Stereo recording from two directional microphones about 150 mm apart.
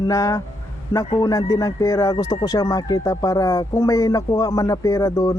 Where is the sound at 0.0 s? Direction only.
20° left (ahead or behind).